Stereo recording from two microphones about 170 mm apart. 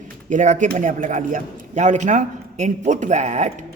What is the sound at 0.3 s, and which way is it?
Speech, 45° right (ahead or behind).